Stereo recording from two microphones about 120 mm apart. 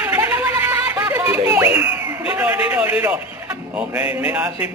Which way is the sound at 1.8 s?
10° right (ahead or behind).